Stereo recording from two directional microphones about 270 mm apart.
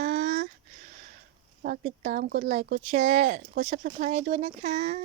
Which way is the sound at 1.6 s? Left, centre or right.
Right.